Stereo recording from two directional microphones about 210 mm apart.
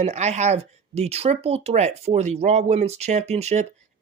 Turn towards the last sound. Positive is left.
turn(degrees=-30)  # may be behind; listen again after turning